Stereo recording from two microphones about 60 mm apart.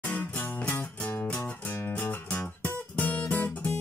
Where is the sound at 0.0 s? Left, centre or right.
Left.